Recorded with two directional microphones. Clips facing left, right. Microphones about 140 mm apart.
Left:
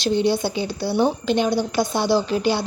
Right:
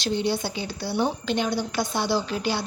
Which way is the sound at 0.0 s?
25° left (ahead or behind).